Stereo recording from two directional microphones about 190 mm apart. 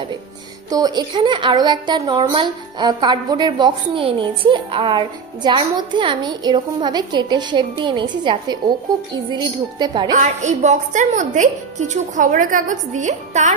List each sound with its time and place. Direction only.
0.7 s a woman's voice: 20° right (ahead or behind)
10.1 s a woman's voice: 40° right (ahead or behind)